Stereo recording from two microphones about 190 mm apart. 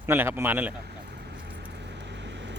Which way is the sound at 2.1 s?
70° right (ahead or behind).